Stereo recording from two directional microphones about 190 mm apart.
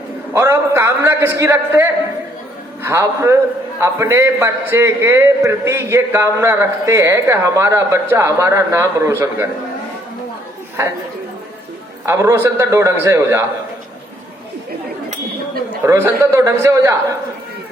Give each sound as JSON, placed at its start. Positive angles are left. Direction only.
{"t": 0.3, "sound": "a man's voice", "side_deg": -10}
{"t": 12.0, "sound": "a man's voice", "side_deg": -15}
{"t": 15.9, "sound": "a man's voice", "side_deg": -15}